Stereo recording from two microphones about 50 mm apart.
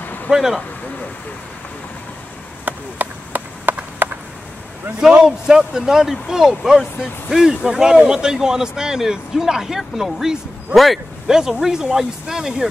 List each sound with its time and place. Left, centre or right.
0.3 s speech: centre
2.6 s chop: right
5.2 s speech: centre
11.2 s speech: centre